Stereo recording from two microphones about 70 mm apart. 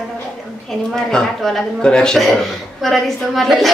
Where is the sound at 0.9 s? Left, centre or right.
Centre.